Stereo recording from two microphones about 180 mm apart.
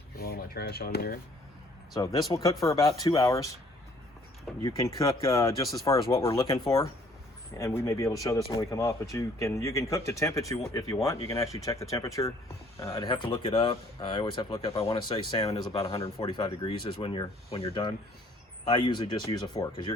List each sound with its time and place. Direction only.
0.2 s speech: 55° left (ahead or behind)
2.0 s speech: 20° left (ahead or behind)
4.6 s speech: 20° left (ahead or behind)